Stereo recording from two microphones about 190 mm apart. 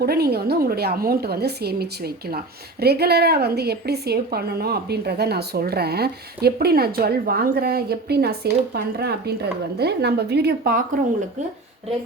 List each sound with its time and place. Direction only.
0.0 s a woman's voice: 55° right (ahead or behind)